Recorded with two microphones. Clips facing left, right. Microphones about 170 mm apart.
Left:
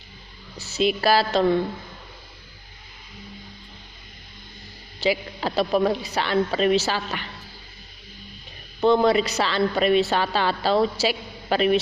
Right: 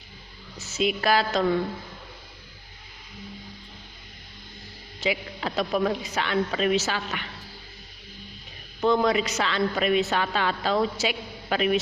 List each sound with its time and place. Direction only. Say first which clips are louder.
0.5 s a woman's voice: left 3 dB; 35° left (ahead or behind)
4.9 s a woman's voice: left 4 dB; 35° left (ahead or behind)
8.8 s a woman's voice: left 4 dB; 30° left (ahead or behind)